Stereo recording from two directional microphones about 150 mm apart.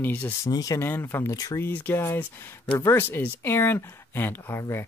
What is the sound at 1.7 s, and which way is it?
Speech, 15° left (ahead or behind).